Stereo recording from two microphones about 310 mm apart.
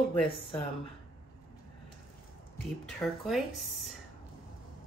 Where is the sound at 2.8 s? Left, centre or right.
Centre.